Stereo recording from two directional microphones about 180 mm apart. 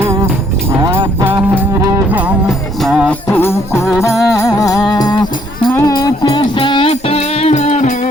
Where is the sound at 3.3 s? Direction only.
15° left (ahead or behind).